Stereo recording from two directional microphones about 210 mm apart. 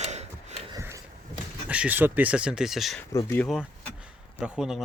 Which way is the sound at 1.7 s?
5° right (ahead or behind).